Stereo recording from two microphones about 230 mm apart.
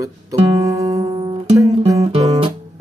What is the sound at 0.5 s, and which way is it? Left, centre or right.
Music, centre.